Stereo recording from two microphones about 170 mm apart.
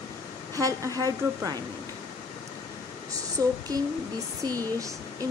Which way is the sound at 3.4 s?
20° right (ahead or behind).